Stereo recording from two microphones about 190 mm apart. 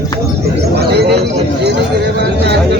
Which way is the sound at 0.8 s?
60° right (ahead or behind).